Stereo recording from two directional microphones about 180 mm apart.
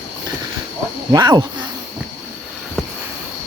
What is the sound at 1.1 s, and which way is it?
Speech, 20° right (ahead or behind).